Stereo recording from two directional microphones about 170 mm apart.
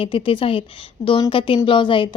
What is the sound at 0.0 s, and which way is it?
A woman's voice, 30° left (ahead or behind).